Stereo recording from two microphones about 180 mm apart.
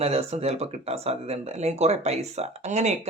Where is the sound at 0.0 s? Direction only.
35° right (ahead or behind).